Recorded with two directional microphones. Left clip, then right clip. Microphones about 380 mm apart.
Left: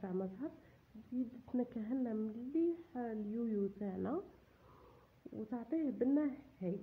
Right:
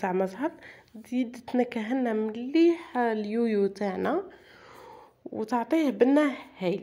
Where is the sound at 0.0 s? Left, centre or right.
Centre.